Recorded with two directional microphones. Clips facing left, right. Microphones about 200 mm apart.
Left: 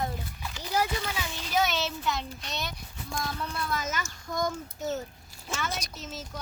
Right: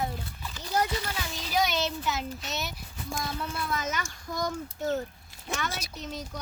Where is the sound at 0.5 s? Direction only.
5° left (ahead or behind).